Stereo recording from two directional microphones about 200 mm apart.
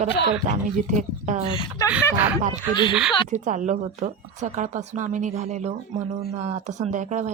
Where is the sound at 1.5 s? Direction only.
20° left (ahead or behind).